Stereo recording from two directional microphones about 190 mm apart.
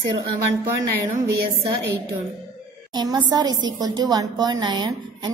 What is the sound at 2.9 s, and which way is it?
A woman's voice, 20° right (ahead or behind).